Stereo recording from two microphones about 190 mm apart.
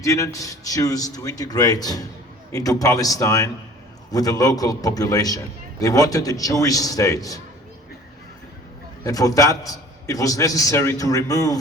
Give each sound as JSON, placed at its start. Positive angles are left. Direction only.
{"t": 0.0, "sound": "a man's voice", "side_deg": 15}
{"t": 9.0, "sound": "a man's voice", "side_deg": 20}